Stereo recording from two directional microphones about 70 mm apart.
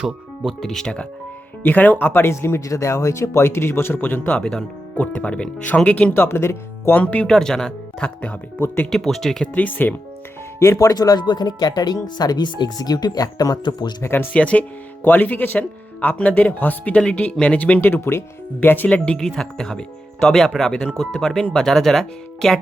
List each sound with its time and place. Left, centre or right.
0.6 s speech: centre
1.6 s speech: left
4.3 s speech: centre
6.1 s speech: left
6.9 s speech: left
7.3 s speech: centre; by 8.9 s left
8.9 s speech: centre
9.6 s speech: left
10.6 s speech: left
10.8 s speech: left
14.0 s speech: left
14.3 s speech: centre
17.7 s speech: left
18.9 s speech: centre